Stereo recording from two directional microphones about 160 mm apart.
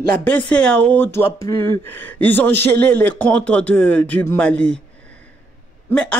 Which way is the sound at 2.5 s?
90° right.